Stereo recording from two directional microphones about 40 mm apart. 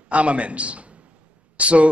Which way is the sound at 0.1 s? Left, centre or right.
Right.